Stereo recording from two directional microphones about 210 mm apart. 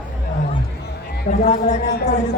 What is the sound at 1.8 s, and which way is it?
Speech, 50° left (ahead or behind).